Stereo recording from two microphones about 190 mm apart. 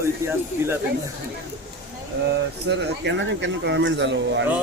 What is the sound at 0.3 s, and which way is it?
Speech, 10° right (ahead or behind).